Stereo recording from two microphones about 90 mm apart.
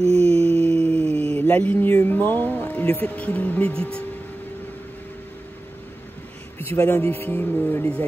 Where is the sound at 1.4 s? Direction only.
15° left (ahead or behind).